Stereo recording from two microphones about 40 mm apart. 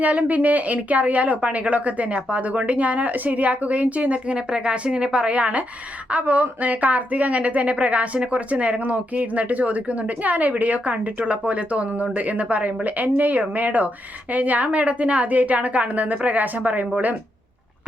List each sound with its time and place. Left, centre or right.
0.0 s a woman's voice: right